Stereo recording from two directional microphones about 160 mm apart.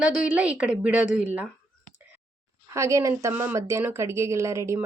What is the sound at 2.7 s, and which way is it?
Speech, 20° right (ahead or behind).